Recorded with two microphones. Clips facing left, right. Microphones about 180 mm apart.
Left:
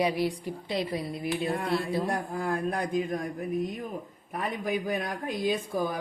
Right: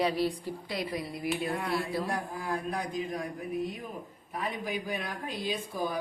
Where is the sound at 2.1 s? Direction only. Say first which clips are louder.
Left 4 dB; 50° left (ahead or behind).